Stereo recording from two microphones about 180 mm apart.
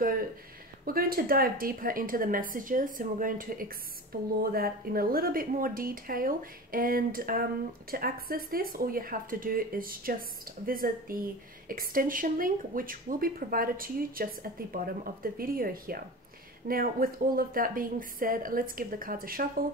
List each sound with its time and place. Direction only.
0.8 s speech: 55° right (ahead or behind)